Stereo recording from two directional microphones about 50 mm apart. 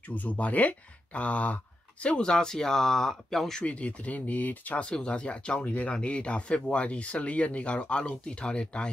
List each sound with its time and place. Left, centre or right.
0.0 s speech: left; by 3.6 s centre
3.6 s speech: left